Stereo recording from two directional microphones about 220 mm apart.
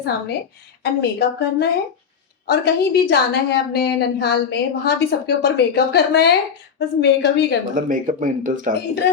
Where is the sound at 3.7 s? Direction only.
45° left (ahead or behind).